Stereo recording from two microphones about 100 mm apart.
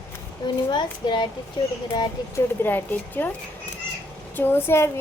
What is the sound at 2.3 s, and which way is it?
A woman's voice, 20° left (ahead or behind).